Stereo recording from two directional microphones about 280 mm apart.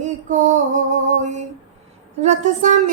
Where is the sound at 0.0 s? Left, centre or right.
Right.